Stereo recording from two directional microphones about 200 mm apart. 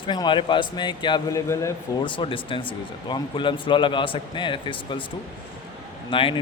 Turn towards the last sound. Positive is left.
turn(degrees=25)  # may be behind; listen again after turning